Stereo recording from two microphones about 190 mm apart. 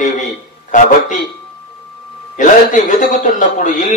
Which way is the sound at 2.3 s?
40° left (ahead or behind).